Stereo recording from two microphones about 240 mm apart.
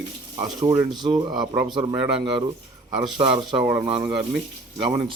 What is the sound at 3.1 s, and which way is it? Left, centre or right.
Speech, right.